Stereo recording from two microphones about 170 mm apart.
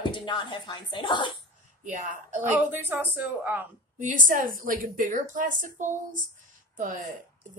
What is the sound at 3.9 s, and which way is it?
A woman's voice, 50° right (ahead or behind).